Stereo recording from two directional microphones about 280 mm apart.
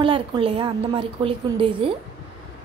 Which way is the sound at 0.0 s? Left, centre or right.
Centre.